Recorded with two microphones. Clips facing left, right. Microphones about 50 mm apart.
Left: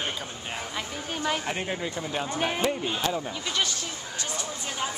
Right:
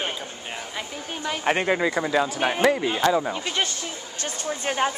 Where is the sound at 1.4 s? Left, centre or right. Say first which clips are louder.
Right 9 dB; right.